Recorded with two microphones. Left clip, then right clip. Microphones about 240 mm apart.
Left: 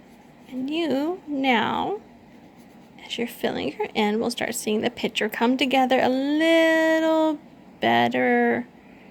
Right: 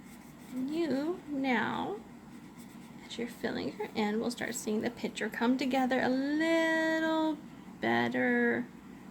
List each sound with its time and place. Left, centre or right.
0.6 s speech: left
3.0 s speech: left